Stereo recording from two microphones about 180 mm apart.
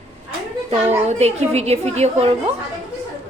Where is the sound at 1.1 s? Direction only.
35° right (ahead or behind).